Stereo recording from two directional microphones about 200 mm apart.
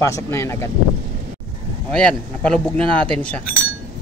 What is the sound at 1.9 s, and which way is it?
A man's voice, 5° left (ahead or behind).